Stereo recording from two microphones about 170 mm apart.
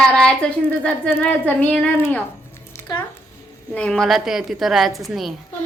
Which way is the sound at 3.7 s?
5° left (ahead or behind).